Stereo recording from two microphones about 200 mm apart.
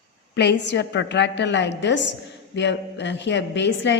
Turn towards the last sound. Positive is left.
turn(degrees=65)  # may be behind; listen again after turning